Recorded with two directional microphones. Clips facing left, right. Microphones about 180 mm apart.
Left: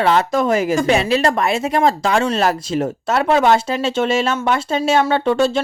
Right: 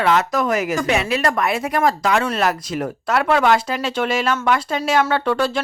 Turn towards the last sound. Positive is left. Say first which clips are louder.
# left 4 dB
turn(degrees=25)  # may be behind; listen again after turning